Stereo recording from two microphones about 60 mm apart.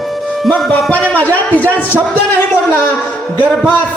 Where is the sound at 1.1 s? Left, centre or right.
Left.